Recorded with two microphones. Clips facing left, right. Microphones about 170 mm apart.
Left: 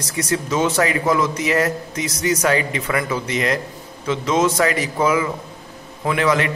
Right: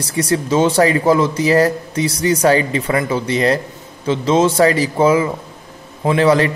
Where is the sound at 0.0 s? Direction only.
30° right (ahead or behind).